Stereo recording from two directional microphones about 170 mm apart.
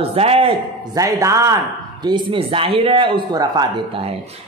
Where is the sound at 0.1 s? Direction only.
35° right (ahead or behind).